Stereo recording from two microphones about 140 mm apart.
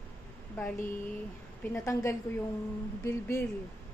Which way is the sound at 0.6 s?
15° left (ahead or behind).